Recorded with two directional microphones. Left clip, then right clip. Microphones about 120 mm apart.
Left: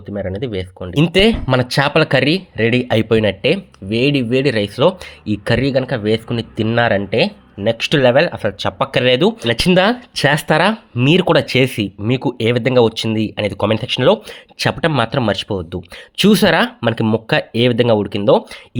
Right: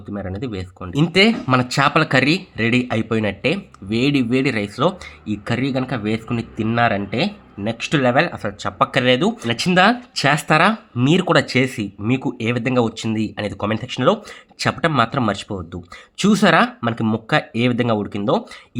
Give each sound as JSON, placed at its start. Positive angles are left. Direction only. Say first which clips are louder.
{"t": 0.1, "sound": "speech", "louder": "left 6 dB", "side_deg": 30}
{"t": 2.8, "sound": "speech", "louder": "left 7 dB", "side_deg": 35}
{"t": 3.8, "sound": "speech", "louder": "left 3 dB", "side_deg": 20}
{"t": 5.2, "sound": "speech", "louder": "left 6 dB", "side_deg": 35}
{"t": 7.7, "sound": "speech", "louder": "left 6 dB", "side_deg": 40}
{"t": 8.1, "sound": "speech", "louder": "left 4 dB", "side_deg": 25}